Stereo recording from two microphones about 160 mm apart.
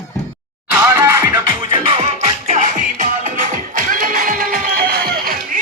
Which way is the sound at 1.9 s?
45° right (ahead or behind).